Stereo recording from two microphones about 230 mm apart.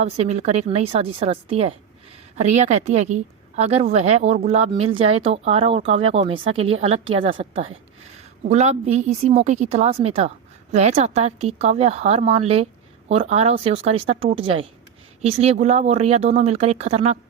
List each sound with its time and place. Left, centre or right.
0.0 s a woman's voice: right